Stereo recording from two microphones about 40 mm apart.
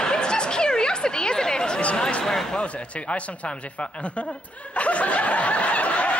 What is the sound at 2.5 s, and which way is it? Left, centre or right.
Speech, left.